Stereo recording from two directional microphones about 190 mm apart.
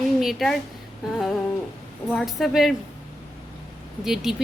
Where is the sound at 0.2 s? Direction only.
Centre (ahead or behind).